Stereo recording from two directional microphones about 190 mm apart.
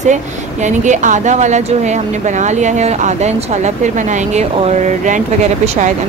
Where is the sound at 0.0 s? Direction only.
40° right (ahead or behind).